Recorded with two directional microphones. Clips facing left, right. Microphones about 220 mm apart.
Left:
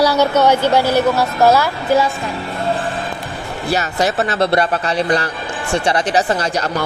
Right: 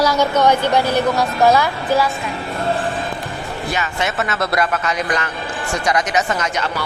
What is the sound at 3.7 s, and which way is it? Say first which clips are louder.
A man's voice: left 6 dB; 35° left (ahead or behind).